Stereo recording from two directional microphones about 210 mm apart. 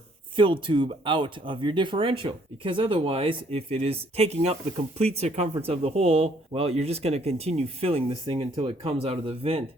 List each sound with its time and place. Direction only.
0.3 s speech: 25° right (ahead or behind)